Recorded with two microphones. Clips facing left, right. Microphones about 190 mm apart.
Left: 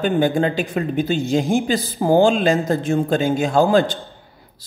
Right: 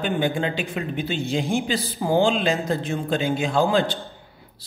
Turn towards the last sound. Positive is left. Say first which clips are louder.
# left 5 dB
turn(degrees=45)  # may be behind; listen again after turning